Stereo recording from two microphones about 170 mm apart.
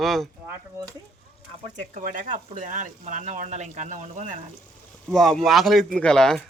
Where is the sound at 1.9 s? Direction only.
50° right (ahead or behind).